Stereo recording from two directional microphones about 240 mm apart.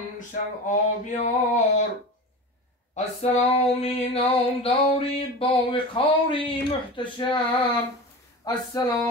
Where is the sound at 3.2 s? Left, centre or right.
Left.